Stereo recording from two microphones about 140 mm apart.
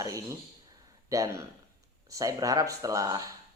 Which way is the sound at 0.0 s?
25° right (ahead or behind).